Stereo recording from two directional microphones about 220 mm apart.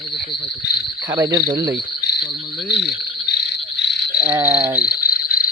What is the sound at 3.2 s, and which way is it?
Frog, 50° left (ahead or behind).